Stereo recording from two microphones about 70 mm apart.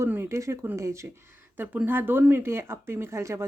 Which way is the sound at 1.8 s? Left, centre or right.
Right.